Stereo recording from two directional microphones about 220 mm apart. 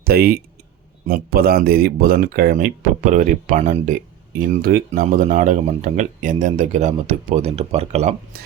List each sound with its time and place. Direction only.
0.0 s speech: 45° right (ahead or behind)